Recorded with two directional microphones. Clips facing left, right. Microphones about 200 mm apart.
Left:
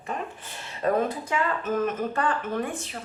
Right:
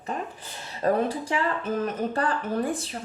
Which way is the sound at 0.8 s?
30° right (ahead or behind).